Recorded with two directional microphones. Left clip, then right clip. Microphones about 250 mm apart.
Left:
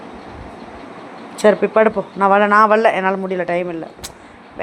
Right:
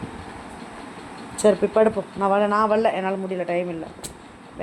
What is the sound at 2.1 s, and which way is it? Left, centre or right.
Speech, centre.